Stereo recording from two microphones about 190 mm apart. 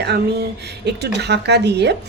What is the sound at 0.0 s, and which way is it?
Speech, 60° right (ahead or behind).